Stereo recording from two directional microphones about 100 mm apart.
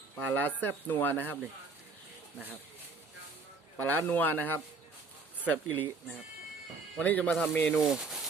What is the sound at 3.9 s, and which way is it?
Speech, 20° left (ahead or behind).